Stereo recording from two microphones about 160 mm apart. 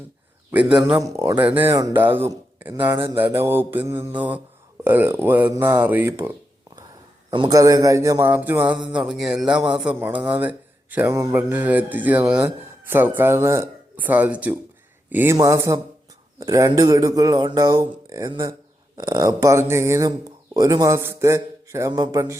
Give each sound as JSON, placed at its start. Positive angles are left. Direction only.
{"t": 0.5, "sound": "speech", "side_deg": -5}
{"t": 0.9, "sound": "speech", "side_deg": -20}
{"t": 7.3, "sound": "speech", "side_deg": -25}